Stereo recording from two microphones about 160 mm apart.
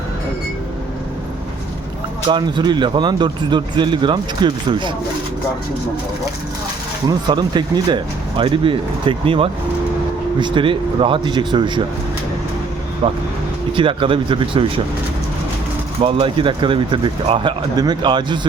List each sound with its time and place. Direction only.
2.2 s speech: 30° right (ahead or behind)
7.1 s speech: 25° right (ahead or behind)
13.7 s speech: 30° right (ahead or behind)
16.0 s speech: 40° right (ahead or behind)